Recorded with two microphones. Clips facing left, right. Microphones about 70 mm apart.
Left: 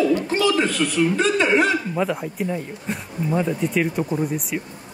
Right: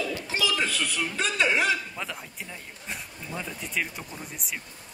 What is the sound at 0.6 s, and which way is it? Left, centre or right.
A man's voice, centre.